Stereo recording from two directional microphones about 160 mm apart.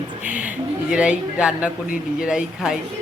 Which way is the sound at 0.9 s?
5° right (ahead or behind).